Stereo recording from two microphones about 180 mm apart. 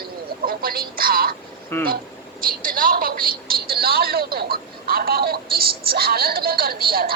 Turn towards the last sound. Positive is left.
turn(degrees=-55)  # may be behind; listen again after turning